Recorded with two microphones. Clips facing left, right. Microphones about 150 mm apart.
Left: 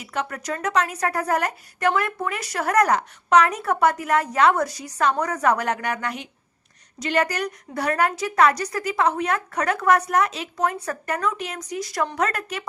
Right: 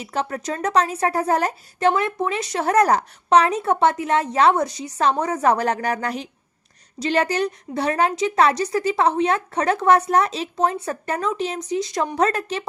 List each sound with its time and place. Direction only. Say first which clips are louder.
0.0 s a woman's voice: right 3 dB; 30° right (ahead or behind)